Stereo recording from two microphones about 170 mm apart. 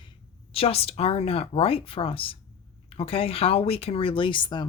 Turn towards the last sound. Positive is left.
turn(degrees=30)  # may be behind; listen again after turning